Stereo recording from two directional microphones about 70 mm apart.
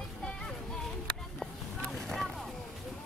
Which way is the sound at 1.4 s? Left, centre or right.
Centre.